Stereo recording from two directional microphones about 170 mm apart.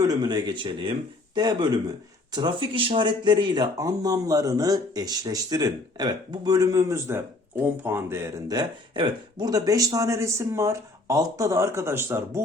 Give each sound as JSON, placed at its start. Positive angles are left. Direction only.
{"t": 0.0, "sound": "speech", "side_deg": -25}